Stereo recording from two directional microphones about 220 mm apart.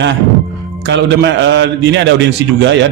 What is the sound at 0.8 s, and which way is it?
A man's voice, 55° right (ahead or behind).